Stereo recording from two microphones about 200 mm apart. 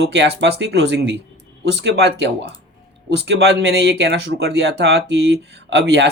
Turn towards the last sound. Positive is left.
turn(degrees=-55)  # may be behind; listen again after turning